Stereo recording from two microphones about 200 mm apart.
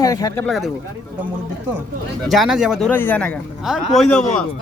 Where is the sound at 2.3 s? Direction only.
Centre (ahead or behind).